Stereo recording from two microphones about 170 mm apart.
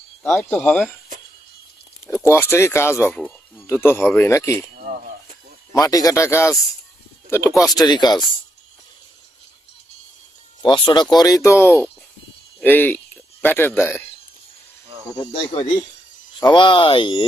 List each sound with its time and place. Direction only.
0.2 s speech: 5° left (ahead or behind)
2.3 s speech: 15° left (ahead or behind)
5.7 s speech: 20° left (ahead or behind)
7.8 s speech: 25° left (ahead or behind)
10.6 s speech: 25° left (ahead or behind)
15.5 s speech: 30° left (ahead or behind)